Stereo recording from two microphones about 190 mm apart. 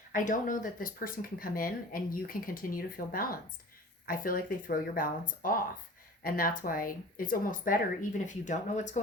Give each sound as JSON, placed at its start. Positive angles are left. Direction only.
{"t": 0.1, "sound": "speech", "side_deg": 45}